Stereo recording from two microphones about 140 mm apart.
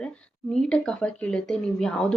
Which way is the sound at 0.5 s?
5° left (ahead or behind).